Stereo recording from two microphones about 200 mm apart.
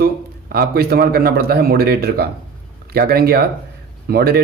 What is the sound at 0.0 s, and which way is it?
A man's voice, 50° right (ahead or behind).